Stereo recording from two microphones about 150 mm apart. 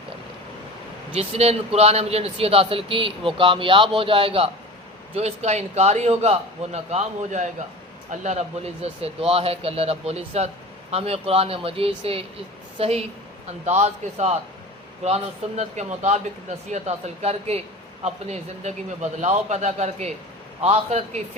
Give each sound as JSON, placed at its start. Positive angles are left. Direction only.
{"t": 1.1, "sound": "a man's voice", "side_deg": -45}